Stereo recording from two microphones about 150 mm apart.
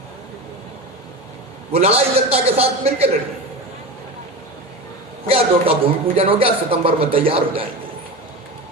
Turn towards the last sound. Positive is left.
turn(degrees=-35)  # may be behind; listen again after turning